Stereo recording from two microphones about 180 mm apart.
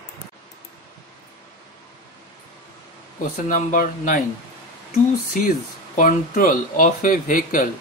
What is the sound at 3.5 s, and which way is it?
Speech, 45° left (ahead or behind).